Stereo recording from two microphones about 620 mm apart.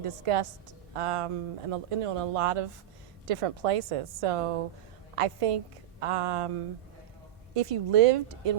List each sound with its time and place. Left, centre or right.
0.0 s a woman's voice: right
7.5 s a woman's voice: right